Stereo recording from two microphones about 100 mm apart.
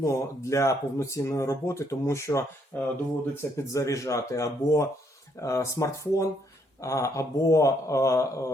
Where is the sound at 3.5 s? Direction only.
35° left (ahead or behind).